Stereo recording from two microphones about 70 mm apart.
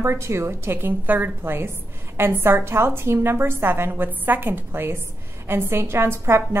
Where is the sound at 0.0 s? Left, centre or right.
Right.